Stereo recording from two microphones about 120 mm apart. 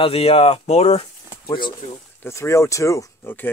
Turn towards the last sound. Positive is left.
turn(degrees=20)  # may be behind; listen again after turning